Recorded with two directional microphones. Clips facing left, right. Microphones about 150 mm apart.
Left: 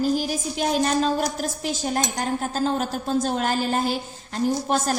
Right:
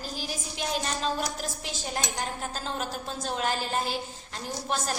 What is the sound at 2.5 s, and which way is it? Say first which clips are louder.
A woman's voice: left 9 dB; 40° left (ahead or behind).